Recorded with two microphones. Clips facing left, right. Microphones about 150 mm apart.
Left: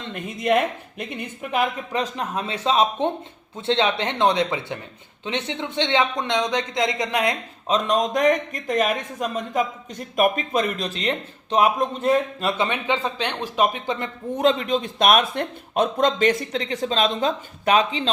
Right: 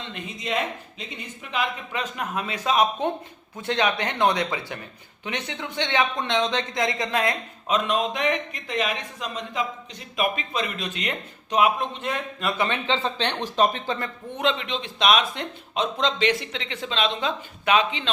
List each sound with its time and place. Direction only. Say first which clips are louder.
0.1 s speech: left 9 dB; 50° left (ahead or behind)
2.0 s a man's voice: left 3 dB; 35° left (ahead or behind)
7.7 s speech: left 3 dB; 40° left (ahead or behind)
12.5 s speech: even; 15° left (ahead or behind)
14.3 s a man's voice: left 6 dB; 40° left (ahead or behind)